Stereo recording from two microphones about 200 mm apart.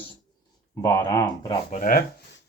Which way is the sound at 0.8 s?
20° left (ahead or behind).